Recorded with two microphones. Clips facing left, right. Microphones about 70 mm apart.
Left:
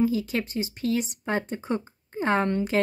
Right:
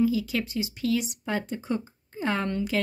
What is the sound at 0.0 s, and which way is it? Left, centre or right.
Speech, left.